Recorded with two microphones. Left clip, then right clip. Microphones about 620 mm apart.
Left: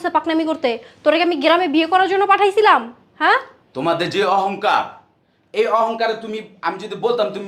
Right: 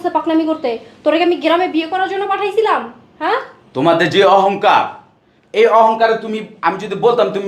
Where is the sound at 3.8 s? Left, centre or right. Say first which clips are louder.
Right 7 dB; centre.